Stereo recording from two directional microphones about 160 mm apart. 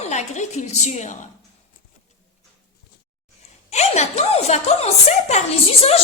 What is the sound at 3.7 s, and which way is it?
A woman's voice, 45° left (ahead or behind).